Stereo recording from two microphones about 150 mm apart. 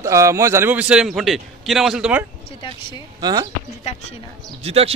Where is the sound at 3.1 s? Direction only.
25° right (ahead or behind).